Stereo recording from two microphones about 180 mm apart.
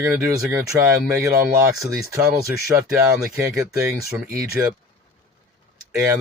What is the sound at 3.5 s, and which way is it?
Speech, 15° right (ahead or behind).